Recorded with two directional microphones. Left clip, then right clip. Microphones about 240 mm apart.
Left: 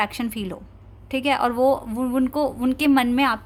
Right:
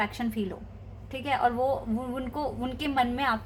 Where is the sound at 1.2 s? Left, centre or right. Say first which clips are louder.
Left 6 dB; left.